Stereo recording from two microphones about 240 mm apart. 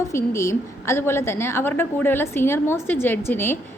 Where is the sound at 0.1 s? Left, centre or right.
Centre.